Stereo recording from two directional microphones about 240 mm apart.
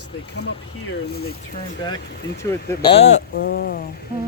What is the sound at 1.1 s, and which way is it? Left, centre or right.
Speech, left.